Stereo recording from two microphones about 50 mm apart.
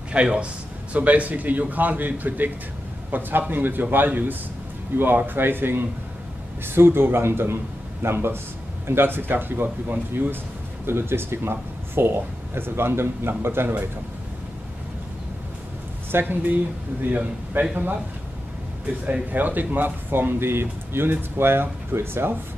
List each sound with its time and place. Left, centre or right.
0.1 s a man's voice: right
16.1 s a man's voice: right
19.3 s speech: right